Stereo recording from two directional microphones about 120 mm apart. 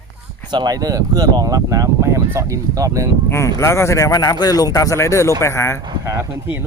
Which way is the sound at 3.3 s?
25° left (ahead or behind).